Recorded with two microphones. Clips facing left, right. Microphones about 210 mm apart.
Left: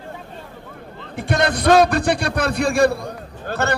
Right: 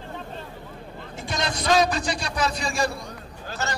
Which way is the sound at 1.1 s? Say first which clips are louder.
Left 9 dB; 60° left (ahead or behind).